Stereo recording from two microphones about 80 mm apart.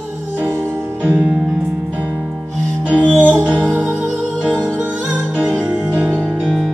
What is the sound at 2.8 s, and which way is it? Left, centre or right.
Music, centre.